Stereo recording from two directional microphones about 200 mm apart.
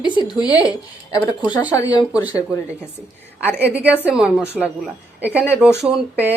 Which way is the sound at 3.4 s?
5° right (ahead or behind).